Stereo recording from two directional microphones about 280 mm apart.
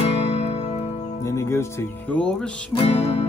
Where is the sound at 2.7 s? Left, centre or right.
Left.